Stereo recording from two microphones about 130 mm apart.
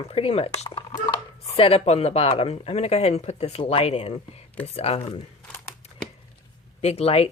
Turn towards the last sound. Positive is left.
turn(degrees=50)  # may be behind; listen again after turning